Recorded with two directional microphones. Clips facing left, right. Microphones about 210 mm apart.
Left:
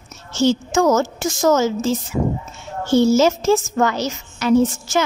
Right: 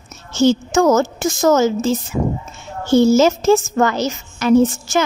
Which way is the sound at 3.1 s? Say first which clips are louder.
Right 2 dB; 50° right (ahead or behind).